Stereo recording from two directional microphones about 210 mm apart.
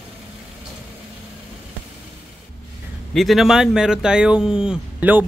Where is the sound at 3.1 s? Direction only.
Centre (ahead or behind).